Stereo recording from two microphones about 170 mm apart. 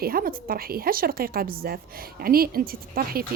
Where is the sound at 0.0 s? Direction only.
60° right (ahead or behind).